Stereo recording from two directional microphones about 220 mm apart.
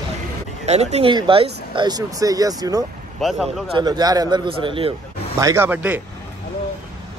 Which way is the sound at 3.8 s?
20° right (ahead or behind).